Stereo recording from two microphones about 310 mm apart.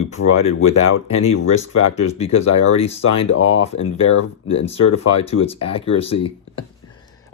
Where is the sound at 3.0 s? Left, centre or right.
Left.